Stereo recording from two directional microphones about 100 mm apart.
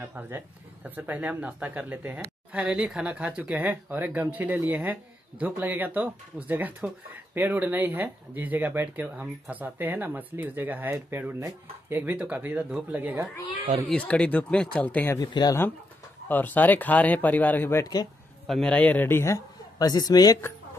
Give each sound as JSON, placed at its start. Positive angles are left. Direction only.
{"t": 0.1, "sound": "speech", "side_deg": -20}
{"t": 13.8, "sound": "speech", "side_deg": 10}
{"t": 15.1, "sound": "speech", "side_deg": 40}
{"t": 16.3, "sound": "speech", "side_deg": 20}
{"t": 18.5, "sound": "speech", "side_deg": 10}
{"t": 19.8, "sound": "speech", "side_deg": 40}